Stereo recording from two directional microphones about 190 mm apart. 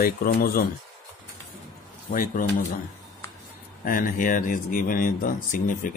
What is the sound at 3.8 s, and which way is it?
Speech, 45° left (ahead or behind).